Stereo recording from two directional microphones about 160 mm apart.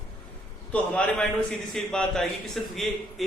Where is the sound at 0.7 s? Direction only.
5° left (ahead or behind).